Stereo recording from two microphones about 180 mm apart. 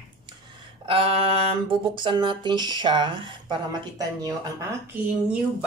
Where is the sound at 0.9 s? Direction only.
30° right (ahead or behind).